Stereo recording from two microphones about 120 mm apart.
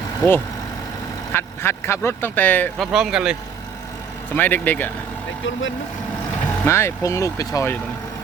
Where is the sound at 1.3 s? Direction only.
20° left (ahead or behind).